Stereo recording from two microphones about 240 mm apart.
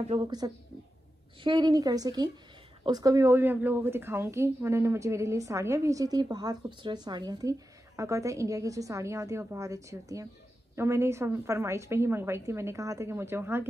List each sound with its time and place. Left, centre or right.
0.0 s a woman's voice: right